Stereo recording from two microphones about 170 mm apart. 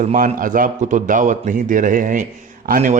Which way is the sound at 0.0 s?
50° right (ahead or behind).